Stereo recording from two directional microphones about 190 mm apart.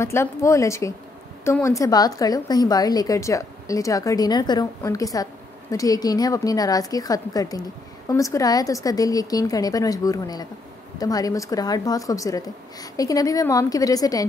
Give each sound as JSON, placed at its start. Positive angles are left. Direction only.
{"t": 0.0, "sound": "a woman's voice", "side_deg": 15}